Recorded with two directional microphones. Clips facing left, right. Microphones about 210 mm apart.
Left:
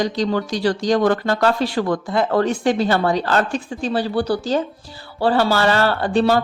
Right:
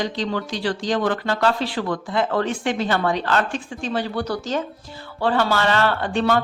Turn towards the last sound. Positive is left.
turn(degrees=35)  # may be behind; listen again after turning